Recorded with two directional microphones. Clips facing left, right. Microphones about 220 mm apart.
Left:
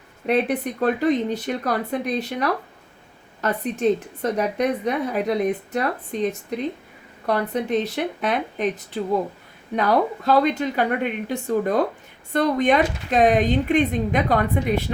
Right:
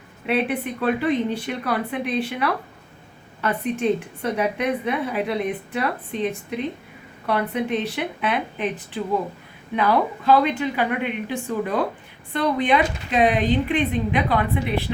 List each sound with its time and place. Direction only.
0.3 s a woman's voice: 40° left (ahead or behind)